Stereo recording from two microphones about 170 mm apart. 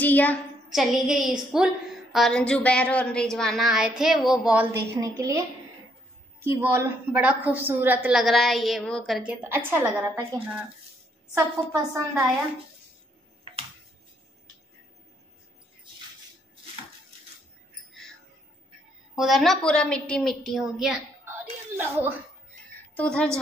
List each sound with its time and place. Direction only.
0.0 s a sound: 10° left (ahead or behind)
0.7 s a woman's voice: 5° right (ahead or behind)
4.9 s a woman's voice: 20° right (ahead or behind)
6.4 s a woman's voice: 15° right (ahead or behind)
19.1 s a woman's voice: centre (ahead or behind)
22.9 s a woman's voice: 5° left (ahead or behind)